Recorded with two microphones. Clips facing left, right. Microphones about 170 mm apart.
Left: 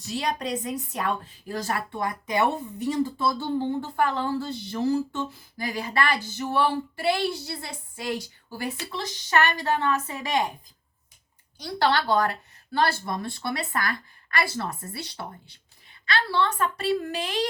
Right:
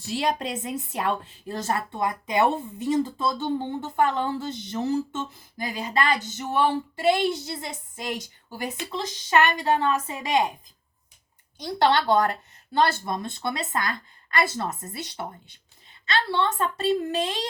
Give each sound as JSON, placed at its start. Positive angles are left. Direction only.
{"t": 0.1, "sound": "a woman's voice", "side_deg": -25}
{"t": 11.6, "sound": "a woman's voice", "side_deg": -20}